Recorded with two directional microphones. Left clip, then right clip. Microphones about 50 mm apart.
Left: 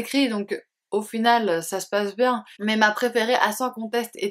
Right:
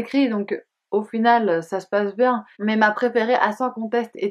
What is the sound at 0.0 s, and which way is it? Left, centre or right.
Speech, centre.